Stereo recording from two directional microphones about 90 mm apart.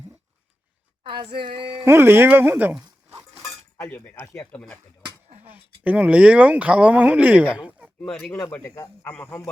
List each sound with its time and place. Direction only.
1.0 s speech: 65° right (ahead or behind)
1.8 s speech: 25° right (ahead or behind)
3.8 s speech: 30° left (ahead or behind)
5.4 s speech: 20° right (ahead or behind)
8.3 s speech: 30° left (ahead or behind)
9.0 s speech: 25° left (ahead or behind)